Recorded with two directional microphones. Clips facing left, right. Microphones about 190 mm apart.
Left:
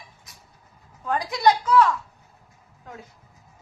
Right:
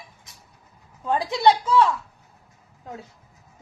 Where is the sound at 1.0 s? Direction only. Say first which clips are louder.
Right 2 dB; 25° right (ahead or behind).